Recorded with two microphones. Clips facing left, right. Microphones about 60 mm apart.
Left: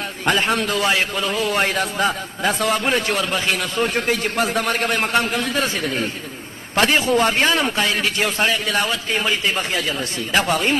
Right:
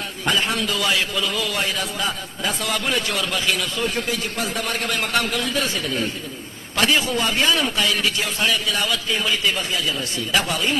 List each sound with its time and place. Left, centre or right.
0.3 s a man's voice: left
9.6 s speech: left